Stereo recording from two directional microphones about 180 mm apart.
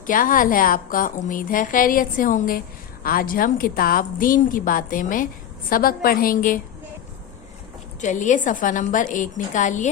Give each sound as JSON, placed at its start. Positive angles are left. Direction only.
{"t": 0.1, "sound": "a woman's voice", "side_deg": 50}
{"t": 8.0, "sound": "a woman's voice", "side_deg": 45}